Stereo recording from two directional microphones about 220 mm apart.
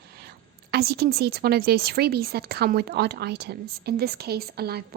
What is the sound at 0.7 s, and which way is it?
A woman's voice, 45° right (ahead or behind).